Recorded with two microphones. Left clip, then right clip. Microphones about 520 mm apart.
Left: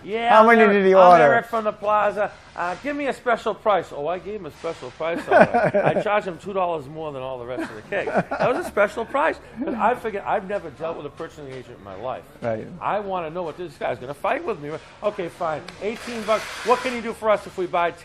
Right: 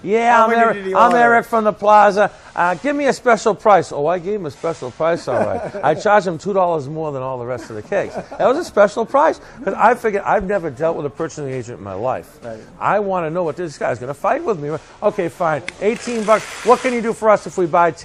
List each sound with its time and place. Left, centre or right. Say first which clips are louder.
0.1 s speech: right 5 dB; right
0.4 s a man's voice: even; left
0.9 s speech: right 2 dB; right
4.4 s a man's voice: right 7 dB; right
5.3 s a man's voice: left 4 dB; left
5.8 s a man's voice: right 6 dB; right
9.6 s speech: right 8 dB; right
12.8 s speech: right 9 dB; right